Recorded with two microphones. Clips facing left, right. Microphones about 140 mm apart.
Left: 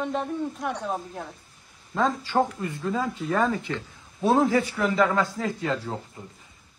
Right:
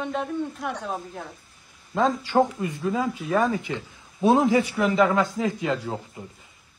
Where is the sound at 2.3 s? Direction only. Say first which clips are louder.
Right 3 dB; 5° right (ahead or behind).